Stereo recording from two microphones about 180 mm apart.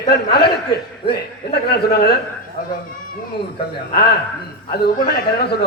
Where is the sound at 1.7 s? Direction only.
65° left (ahead or behind).